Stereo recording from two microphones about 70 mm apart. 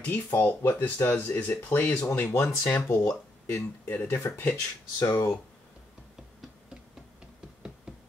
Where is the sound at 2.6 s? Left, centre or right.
Left.